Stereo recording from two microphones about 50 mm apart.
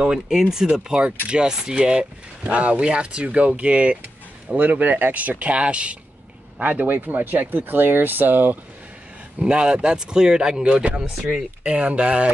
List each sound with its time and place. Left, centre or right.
0.0 s speech: centre
6.6 s speech: right
9.4 s speech: centre
10.6 s speech: right